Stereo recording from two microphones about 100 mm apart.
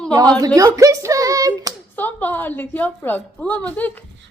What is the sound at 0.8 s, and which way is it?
Speech, 30° right (ahead or behind).